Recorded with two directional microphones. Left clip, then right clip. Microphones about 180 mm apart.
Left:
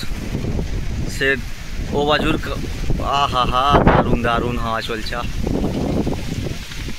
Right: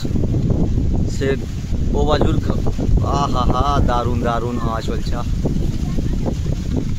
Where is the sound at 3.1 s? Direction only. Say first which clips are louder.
Left 3 dB; centre (ahead or behind).